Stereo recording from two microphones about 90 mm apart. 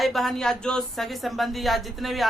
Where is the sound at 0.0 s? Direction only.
Centre (ahead or behind).